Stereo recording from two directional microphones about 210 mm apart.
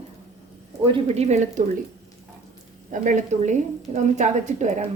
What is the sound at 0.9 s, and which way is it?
Speech, 30° right (ahead or behind).